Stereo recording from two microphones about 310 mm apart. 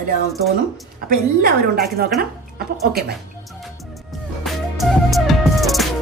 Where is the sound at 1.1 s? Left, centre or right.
Right.